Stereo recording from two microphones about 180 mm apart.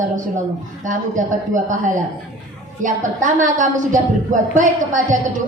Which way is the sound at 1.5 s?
45° right (ahead or behind).